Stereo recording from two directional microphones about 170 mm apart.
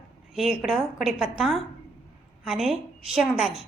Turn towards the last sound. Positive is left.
turn(degrees=0)  # may be behind; listen again after turning